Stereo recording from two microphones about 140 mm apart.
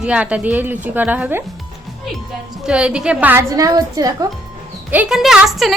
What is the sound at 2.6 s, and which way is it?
Speech, 5° right (ahead or behind).